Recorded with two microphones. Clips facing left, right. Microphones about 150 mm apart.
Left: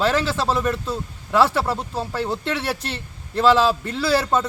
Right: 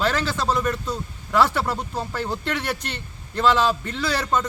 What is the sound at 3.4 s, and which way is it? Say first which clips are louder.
Speech: left 3 dB; 5° left (ahead or behind).